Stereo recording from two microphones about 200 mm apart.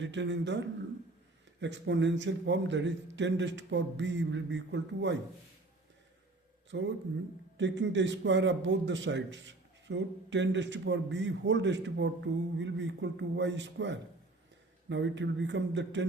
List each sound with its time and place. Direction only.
0.0 s a man's voice: 65° right (ahead or behind)
6.7 s a man's voice: 65° right (ahead or behind)